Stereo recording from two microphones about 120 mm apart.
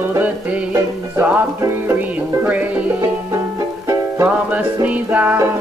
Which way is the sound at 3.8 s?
15° right (ahead or behind).